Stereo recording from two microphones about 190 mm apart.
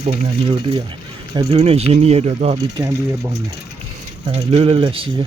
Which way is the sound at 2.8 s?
15° right (ahead or behind).